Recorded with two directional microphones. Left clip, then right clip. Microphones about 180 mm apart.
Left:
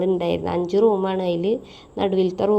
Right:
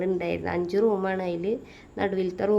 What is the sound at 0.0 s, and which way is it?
A woman's voice, 20° left (ahead or behind).